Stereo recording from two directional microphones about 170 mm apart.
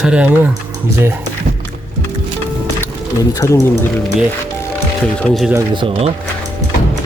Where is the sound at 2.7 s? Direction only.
15° left (ahead or behind).